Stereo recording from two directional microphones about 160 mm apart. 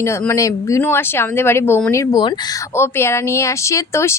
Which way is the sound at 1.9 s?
20° left (ahead or behind).